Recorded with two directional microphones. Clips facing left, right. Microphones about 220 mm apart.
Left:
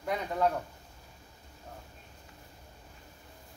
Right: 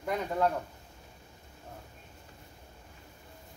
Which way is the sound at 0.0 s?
Centre (ahead or behind).